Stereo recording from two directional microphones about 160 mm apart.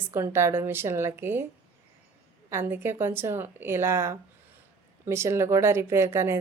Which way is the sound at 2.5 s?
15° right (ahead or behind).